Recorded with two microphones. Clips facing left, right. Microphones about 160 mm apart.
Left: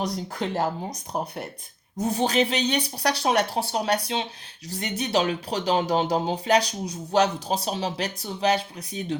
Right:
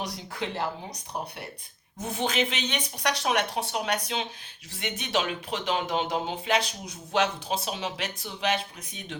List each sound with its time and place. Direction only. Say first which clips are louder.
0.3 s speech: left 4 dB; 45° left (ahead or behind)
2.0 s speech: left 5 dB; 40° left (ahead or behind)